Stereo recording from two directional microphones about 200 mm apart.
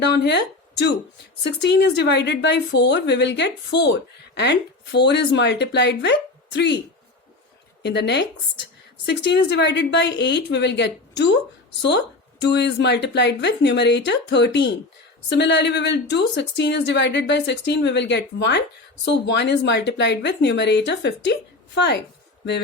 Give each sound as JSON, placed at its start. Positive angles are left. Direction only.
{"t": 0.0, "sound": "a woman's voice", "side_deg": 60}
{"t": 7.8, "sound": "a woman's voice", "side_deg": 60}